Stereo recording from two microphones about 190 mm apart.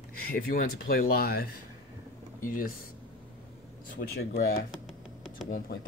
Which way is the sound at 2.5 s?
45° left (ahead or behind).